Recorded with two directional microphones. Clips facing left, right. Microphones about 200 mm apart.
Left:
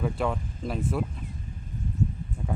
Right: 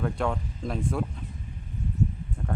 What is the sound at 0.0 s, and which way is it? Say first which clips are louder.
Speech: even; 5° left (ahead or behind).